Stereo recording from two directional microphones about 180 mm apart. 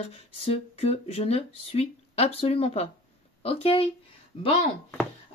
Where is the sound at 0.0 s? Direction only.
35° left (ahead or behind).